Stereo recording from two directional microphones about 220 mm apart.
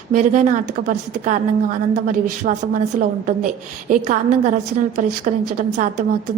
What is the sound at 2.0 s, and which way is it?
A woman's voice, 35° right (ahead or behind).